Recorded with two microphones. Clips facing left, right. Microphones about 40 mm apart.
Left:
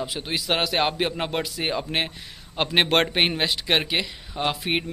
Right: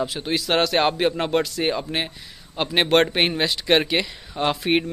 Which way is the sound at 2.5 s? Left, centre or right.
Left.